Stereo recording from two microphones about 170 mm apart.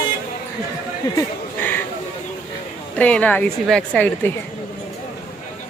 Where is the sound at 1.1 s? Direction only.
10° left (ahead or behind).